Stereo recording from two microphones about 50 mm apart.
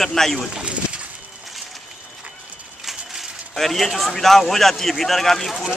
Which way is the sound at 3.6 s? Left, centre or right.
Centre.